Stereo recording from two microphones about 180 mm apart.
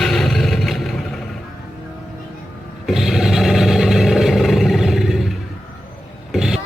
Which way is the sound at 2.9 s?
Centre (ahead or behind).